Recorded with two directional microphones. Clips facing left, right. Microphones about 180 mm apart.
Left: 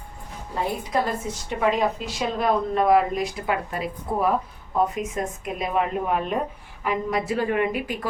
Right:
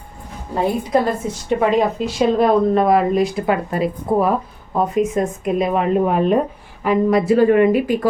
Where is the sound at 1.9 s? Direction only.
30° right (ahead or behind).